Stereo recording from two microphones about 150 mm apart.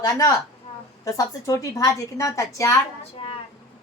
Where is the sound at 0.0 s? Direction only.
25° left (ahead or behind).